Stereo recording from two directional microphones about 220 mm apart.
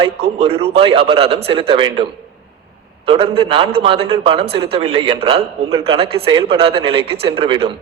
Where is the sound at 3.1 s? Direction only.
25° right (ahead or behind).